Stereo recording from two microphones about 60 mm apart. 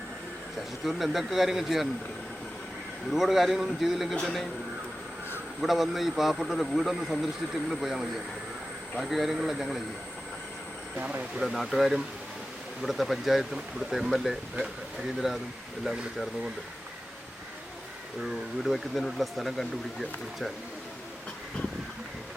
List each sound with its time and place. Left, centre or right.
0.9 s speech: centre
3.1 s speech: centre
5.5 s speech: centre
11.0 s speech: right
11.3 s speech: centre
18.6 s speech: centre